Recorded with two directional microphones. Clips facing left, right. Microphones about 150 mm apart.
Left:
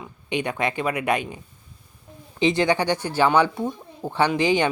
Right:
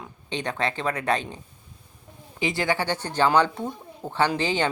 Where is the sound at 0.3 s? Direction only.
10° left (ahead or behind).